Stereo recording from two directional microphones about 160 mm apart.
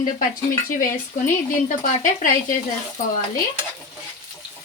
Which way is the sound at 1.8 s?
55° left (ahead or behind).